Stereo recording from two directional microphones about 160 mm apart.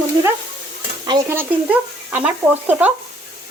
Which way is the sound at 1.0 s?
25° right (ahead or behind).